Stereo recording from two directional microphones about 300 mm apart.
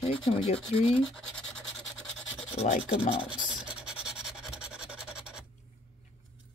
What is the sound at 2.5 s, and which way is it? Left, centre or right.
Speech, centre.